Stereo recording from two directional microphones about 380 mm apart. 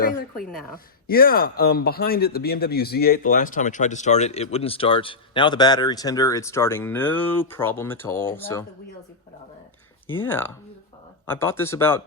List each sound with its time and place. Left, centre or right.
0.0 s a woman's voice: left; by 8.6 s centre
10.1 s speech: centre